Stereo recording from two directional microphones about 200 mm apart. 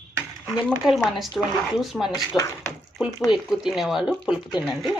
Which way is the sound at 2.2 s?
15° left (ahead or behind).